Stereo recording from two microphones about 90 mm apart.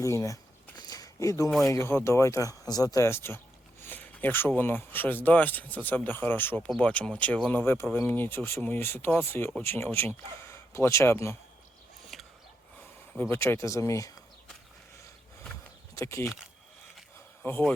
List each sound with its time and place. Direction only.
0.0 s speech: 35° left (ahead or behind)
0.8 s a sound: 45° left (ahead or behind)
1.6 s speech: 30° left (ahead or behind)
6.7 s speech: 10° left (ahead or behind)
7.5 s speech: 25° left (ahead or behind)
12.1 s a sound: centre (ahead or behind)
13.1 s speech: 25° left (ahead or behind)
16.0 s speech: 30° left (ahead or behind)
17.4 s speech: 30° left (ahead or behind)